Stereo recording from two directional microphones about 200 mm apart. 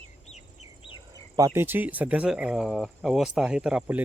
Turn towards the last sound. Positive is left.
turn(degrees=-5)  # may be behind; listen again after turning